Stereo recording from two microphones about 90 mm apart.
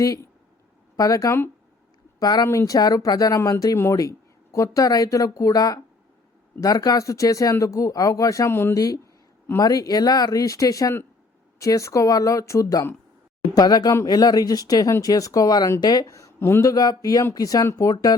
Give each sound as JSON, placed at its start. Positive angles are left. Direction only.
{"t": 0.0, "sound": "speech", "side_deg": 40}
{"t": 9.6, "sound": "speech", "side_deg": 45}